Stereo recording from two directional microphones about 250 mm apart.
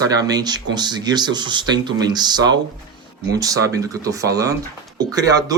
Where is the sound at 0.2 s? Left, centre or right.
Centre.